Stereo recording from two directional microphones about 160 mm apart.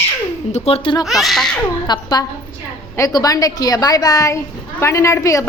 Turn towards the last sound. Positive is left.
turn(degrees=20)  # may be behind; listen again after turning